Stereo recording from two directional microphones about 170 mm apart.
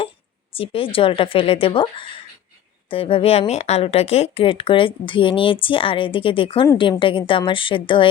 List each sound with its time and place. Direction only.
0.5 s speech: 35° left (ahead or behind)